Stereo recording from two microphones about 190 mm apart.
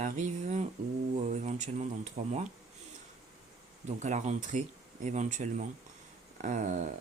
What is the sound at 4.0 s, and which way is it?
Speech, 40° right (ahead or behind).